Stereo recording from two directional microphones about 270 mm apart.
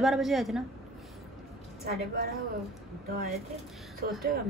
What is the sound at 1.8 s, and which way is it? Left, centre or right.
A woman's voice, right.